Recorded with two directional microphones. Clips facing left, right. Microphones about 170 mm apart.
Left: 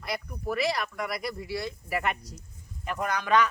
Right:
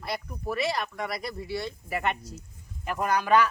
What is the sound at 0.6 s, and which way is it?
Speech, 30° right (ahead or behind).